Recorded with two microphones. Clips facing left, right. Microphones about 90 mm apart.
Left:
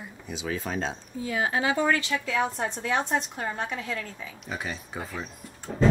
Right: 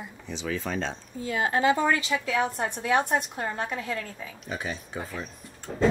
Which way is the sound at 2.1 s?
5° right (ahead or behind).